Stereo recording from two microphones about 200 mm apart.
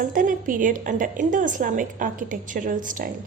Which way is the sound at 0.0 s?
40° right (ahead or behind).